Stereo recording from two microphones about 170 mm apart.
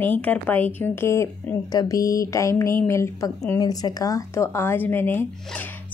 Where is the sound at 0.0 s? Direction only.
10° left (ahead or behind).